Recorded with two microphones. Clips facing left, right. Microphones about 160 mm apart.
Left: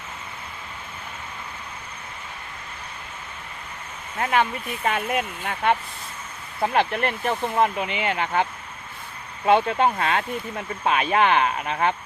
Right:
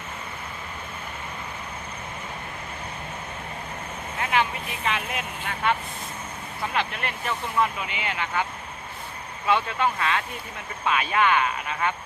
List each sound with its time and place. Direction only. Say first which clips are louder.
4.2 s speech: left 3 dB; 40° left (ahead or behind)
9.5 s speech: left 5 dB; 50° left (ahead or behind)